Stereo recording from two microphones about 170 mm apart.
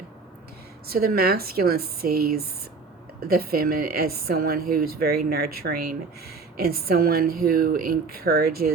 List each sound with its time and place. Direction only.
0.9 s a woman's voice: 65° right (ahead or behind)